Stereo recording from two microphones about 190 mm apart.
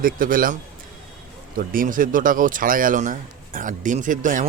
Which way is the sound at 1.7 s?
45° right (ahead or behind).